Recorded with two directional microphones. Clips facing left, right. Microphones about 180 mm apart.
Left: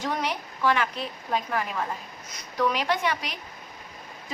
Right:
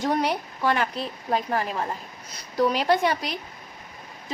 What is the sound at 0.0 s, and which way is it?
Speech, 35° right (ahead or behind).